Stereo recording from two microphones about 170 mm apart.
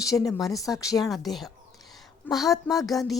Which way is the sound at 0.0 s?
20° left (ahead or behind).